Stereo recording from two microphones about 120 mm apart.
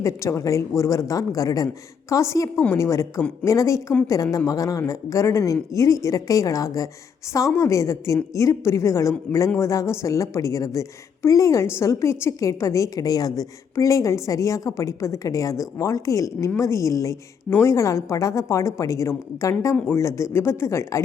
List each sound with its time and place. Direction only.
0.0 s a woman's voice: 25° left (ahead or behind)